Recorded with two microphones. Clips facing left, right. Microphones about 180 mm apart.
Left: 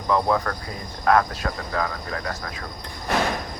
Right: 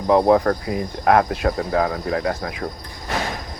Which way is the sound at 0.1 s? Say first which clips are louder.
Right 7 dB; 55° right (ahead or behind).